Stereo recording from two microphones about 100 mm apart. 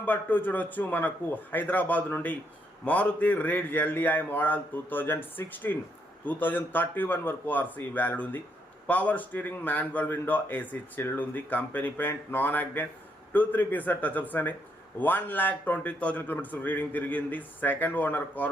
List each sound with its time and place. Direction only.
0.0 s a man's voice: 20° left (ahead or behind)